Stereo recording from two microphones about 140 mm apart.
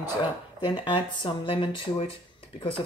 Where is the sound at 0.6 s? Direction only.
35° left (ahead or behind).